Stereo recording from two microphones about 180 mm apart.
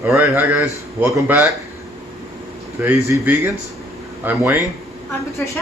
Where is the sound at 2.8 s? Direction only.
10° right (ahead or behind).